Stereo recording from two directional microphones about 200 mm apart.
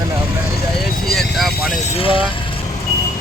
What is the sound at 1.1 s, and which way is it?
Speech, centre (ahead or behind).